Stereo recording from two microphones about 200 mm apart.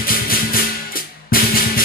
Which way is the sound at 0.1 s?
45° left (ahead or behind).